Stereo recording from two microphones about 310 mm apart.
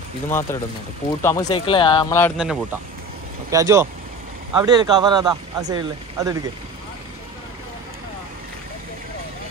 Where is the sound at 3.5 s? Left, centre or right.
Centre.